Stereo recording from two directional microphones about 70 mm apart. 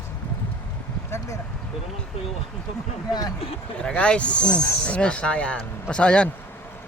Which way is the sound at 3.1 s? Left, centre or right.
Left.